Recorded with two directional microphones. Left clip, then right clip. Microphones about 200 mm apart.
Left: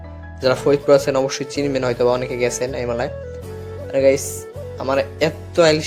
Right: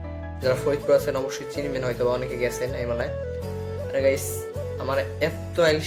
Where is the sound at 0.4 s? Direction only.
40° left (ahead or behind).